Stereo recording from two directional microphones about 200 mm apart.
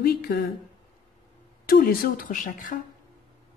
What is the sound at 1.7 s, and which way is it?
A woman's voice, 45° left (ahead or behind).